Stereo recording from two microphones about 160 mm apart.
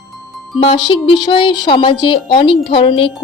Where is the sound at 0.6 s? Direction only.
30° left (ahead or behind).